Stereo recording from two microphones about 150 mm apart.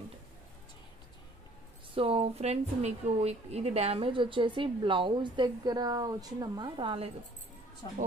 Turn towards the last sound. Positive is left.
turn(degrees=30)  # may be behind; listen again after turning